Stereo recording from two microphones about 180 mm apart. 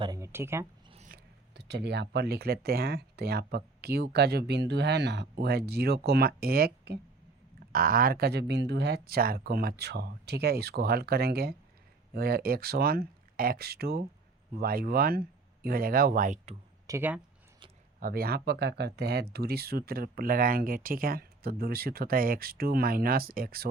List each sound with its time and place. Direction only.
0.0 s speech: 20° right (ahead or behind)
1.0 s speech: 60° right (ahead or behind)
16.8 s speech: 15° right (ahead or behind)
18.0 s speech: 55° right (ahead or behind)